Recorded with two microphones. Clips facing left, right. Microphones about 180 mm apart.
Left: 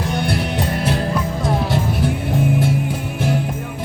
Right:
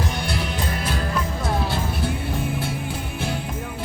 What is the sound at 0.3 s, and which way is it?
Music, 65° left (ahead or behind).